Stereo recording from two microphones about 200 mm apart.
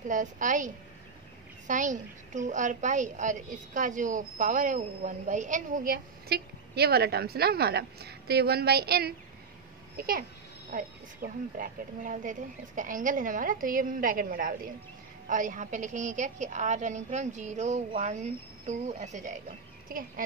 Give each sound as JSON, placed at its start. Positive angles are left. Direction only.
{"t": 0.1, "sound": "a woman's voice", "side_deg": -40}
{"t": 1.7, "sound": "a woman's voice", "side_deg": -40}